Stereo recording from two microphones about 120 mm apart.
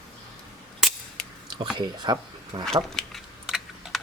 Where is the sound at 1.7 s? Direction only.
40° right (ahead or behind).